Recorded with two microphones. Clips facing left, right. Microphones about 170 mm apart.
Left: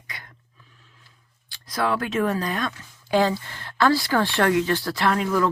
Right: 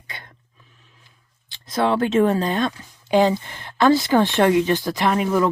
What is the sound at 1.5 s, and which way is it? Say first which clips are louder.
Speech: right 4 dB; 25° right (ahead or behind).